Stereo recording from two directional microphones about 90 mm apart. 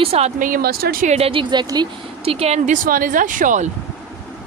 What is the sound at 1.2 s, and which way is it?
Speech, 80° right.